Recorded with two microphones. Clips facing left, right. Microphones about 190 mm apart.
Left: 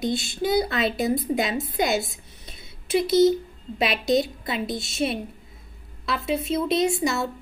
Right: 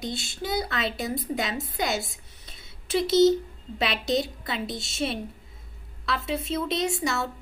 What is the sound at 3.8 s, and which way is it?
A woman's voice, 15° left (ahead or behind).